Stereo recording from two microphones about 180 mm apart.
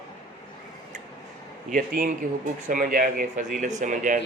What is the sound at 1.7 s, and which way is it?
Speech, 50° right (ahead or behind).